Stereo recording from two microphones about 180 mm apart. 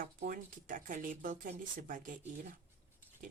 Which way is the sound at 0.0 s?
50° right (ahead or behind).